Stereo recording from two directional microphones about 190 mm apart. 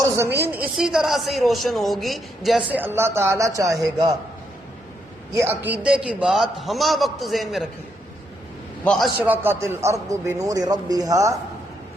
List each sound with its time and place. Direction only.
0.4 s a man's voice: 10° right (ahead or behind)
2.7 s a man's voice: 10° right (ahead or behind)
5.3 s a man's voice: 15° right (ahead or behind)
8.8 s a man's voice: 5° left (ahead or behind)
9.1 s a man's voice: 10° right (ahead or behind)